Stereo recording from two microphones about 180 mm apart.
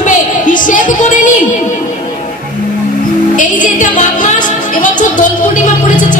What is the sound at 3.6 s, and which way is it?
Music, 45° left (ahead or behind).